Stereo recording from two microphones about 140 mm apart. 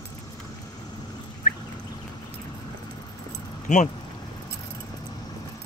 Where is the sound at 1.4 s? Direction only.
75° left (ahead or behind).